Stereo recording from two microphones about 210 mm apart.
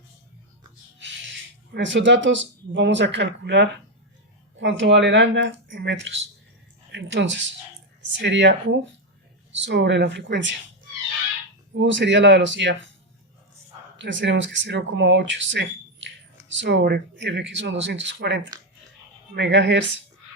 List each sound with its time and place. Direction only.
0.9 s bird: 60° right (ahead or behind)
1.7 s speech: 60° right (ahead or behind)
11.7 s speech: 60° right (ahead or behind)
13.9 s speech: 60° right (ahead or behind)